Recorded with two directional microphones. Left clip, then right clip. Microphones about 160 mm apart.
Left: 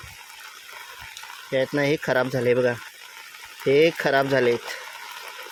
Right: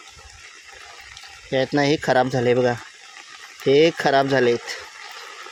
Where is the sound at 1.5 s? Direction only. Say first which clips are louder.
Right 3 dB; 25° right (ahead or behind).